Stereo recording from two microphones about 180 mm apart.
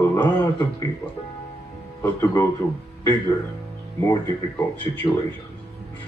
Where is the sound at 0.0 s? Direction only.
15° left (ahead or behind).